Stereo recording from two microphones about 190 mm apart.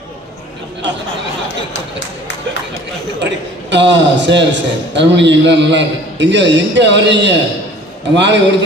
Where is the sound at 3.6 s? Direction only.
70° right (ahead or behind).